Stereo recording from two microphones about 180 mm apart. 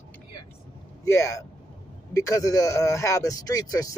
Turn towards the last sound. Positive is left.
turn(degrees=20)  # may be behind; listen again after turning